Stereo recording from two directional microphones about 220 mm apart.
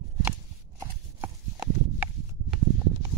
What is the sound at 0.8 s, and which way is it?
Horse, 20° right (ahead or behind).